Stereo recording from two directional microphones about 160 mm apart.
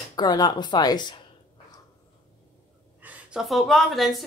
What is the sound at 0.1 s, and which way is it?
Speech, 25° left (ahead or behind).